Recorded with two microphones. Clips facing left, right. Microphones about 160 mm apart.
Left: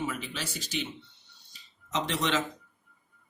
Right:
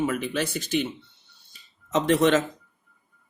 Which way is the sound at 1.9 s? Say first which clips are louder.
Right 10 dB; 50° right (ahead or behind).